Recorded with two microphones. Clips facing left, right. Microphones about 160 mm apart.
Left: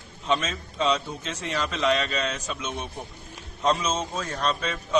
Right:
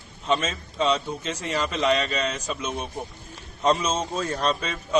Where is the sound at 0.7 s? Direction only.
35° right (ahead or behind).